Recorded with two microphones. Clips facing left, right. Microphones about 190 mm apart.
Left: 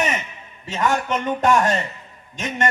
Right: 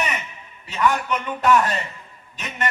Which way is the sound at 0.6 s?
45° left (ahead or behind).